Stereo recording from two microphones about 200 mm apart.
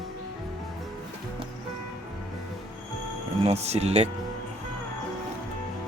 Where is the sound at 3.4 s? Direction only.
30° right (ahead or behind).